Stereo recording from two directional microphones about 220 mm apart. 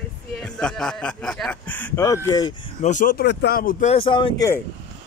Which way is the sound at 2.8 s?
35° left (ahead or behind).